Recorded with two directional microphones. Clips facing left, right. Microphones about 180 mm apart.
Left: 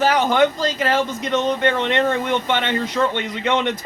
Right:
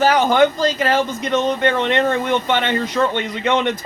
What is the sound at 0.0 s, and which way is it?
Speech, 40° right (ahead or behind).